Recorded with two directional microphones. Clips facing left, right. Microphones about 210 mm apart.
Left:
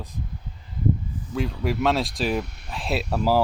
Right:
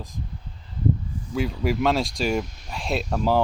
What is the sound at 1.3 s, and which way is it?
Speech, centre (ahead or behind).